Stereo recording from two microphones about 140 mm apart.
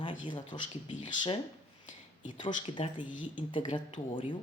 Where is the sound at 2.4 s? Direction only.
35° left (ahead or behind).